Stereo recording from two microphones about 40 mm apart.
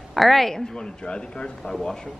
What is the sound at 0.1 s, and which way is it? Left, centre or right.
Speech, centre.